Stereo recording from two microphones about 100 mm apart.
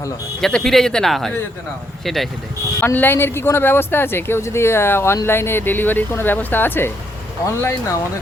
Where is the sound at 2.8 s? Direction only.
20° left (ahead or behind).